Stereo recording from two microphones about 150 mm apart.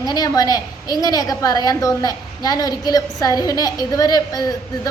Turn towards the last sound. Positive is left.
turn(degrees=25)  # may be behind; listen again after turning